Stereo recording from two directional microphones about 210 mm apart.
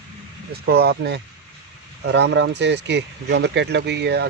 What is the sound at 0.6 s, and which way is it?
Speech, 50° right (ahead or behind).